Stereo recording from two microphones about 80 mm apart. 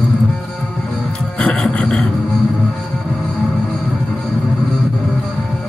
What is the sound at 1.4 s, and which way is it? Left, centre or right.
Music, centre.